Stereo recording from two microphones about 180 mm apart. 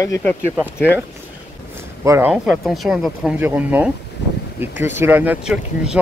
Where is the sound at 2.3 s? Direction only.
Centre (ahead or behind).